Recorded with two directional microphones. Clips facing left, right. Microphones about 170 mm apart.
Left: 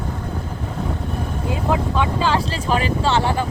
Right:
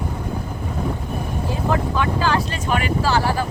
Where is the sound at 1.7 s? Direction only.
20° left (ahead or behind).